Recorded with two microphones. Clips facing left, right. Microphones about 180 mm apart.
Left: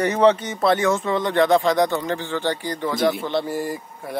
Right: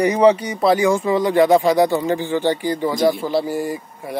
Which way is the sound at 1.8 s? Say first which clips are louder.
Right 4 dB; 15° right (ahead or behind).